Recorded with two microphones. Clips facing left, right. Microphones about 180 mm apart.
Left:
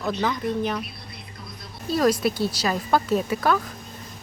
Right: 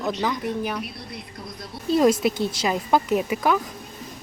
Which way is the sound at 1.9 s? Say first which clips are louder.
Right 3 dB; 25° right (ahead or behind).